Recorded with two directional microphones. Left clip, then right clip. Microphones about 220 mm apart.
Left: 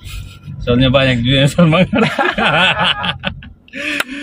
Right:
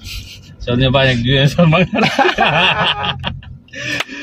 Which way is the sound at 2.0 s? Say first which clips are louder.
Right 2 dB; 15° right (ahead or behind).